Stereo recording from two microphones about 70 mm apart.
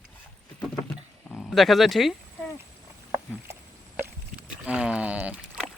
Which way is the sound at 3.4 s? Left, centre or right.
Right.